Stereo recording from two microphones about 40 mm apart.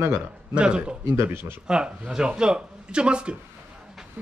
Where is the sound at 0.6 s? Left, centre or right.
Right.